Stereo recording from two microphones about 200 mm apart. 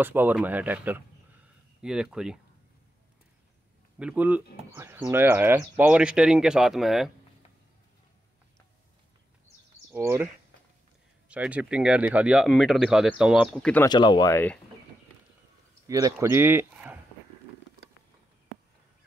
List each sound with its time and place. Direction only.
0.0 s speech: 10° right (ahead or behind)
4.0 s speech: 5° right (ahead or behind)
9.9 s speech: 10° right (ahead or behind); by 13.8 s 5° left (ahead or behind)
13.8 s speech: 20° left (ahead or behind)
15.9 s speech: 15° right (ahead or behind)